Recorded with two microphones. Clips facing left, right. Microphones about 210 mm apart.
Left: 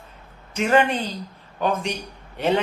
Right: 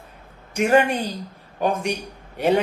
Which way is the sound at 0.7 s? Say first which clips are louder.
Right 1 dB; 10° right (ahead or behind).